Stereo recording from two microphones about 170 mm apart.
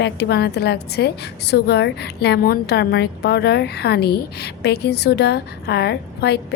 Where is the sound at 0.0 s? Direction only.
75° left (ahead or behind).